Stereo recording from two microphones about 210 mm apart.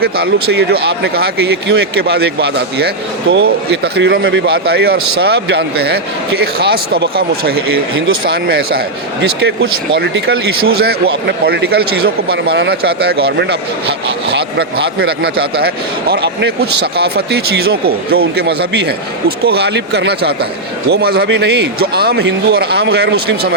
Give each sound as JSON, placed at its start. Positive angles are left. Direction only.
{"t": 0.0, "sound": "a man's voice", "side_deg": -50}
{"t": 7.9, "sound": "speech", "side_deg": -70}
{"t": 8.2, "sound": "a man's voice", "side_deg": -45}
{"t": 10.8, "sound": "a man's voice", "side_deg": -50}